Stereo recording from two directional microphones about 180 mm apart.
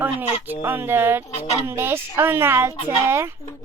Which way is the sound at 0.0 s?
10° right (ahead or behind).